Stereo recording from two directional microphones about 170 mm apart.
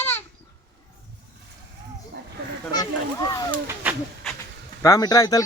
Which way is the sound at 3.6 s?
10° right (ahead or behind).